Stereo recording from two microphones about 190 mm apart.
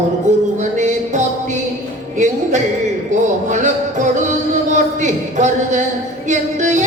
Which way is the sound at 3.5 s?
40° right (ahead or behind).